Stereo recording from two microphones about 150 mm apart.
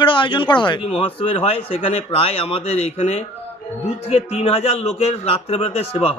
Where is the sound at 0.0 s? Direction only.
35° left (ahead or behind).